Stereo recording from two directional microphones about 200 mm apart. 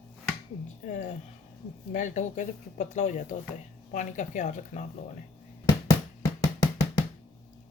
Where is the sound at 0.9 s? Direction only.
40° left (ahead or behind).